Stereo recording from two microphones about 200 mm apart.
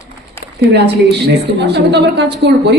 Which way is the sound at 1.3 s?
55° right (ahead or behind).